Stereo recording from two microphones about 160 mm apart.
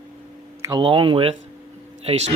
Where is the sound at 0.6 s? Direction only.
30° right (ahead or behind).